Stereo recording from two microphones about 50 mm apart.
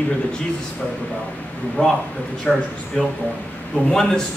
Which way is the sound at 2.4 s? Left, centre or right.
Centre.